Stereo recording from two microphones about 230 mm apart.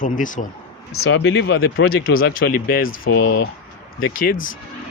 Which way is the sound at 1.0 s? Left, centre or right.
Left.